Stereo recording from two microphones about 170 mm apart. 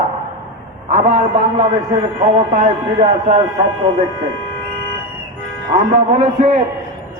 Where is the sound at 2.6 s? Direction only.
45° right (ahead or behind).